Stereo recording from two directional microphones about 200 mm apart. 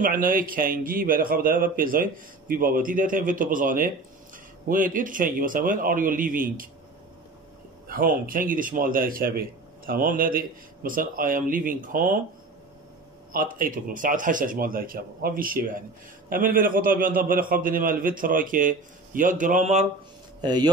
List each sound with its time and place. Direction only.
0.0 s a man's voice: 45° right (ahead or behind)
7.9 s a man's voice: 45° right (ahead or behind)
13.3 s a man's voice: 45° right (ahead or behind)
20.4 s a man's voice: 20° right (ahead or behind)